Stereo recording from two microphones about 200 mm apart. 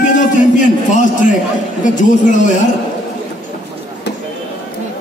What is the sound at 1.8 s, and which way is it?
Speech, 40° left (ahead or behind).